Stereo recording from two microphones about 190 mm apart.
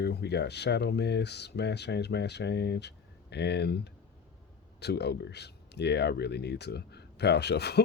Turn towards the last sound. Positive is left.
turn(degrees=60)  # may be behind; listen again after turning